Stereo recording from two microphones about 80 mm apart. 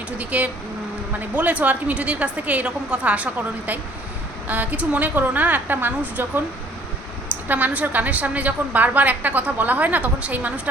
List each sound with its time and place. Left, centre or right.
0.2 s a woman's voice: centre
4.4 s a woman's voice: centre
7.4 s a woman's voice: centre